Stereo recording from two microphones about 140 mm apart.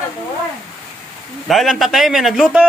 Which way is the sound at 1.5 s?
Centre (ahead or behind).